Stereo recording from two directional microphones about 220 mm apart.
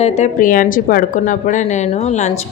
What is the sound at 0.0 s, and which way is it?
Speech, 30° left (ahead or behind).